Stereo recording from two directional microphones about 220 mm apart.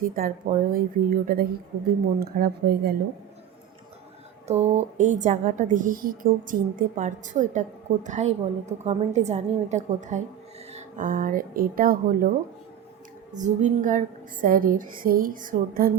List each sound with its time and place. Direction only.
0.0 s a woman's voice: 40° right (ahead or behind)
4.4 s a woman's voice: 30° right (ahead or behind)
13.3 s a woman's voice: 35° right (ahead or behind)